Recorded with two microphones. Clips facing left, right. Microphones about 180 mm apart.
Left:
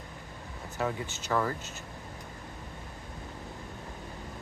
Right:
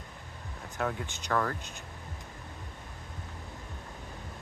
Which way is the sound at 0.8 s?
5° left (ahead or behind).